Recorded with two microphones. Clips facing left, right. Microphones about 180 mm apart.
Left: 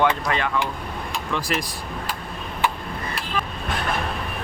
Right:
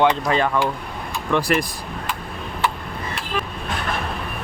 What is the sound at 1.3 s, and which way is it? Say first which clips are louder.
Speech: right 7 dB; 60° right (ahead or behind).